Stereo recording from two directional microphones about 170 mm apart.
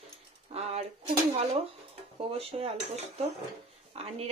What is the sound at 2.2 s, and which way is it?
Speech, 35° right (ahead or behind).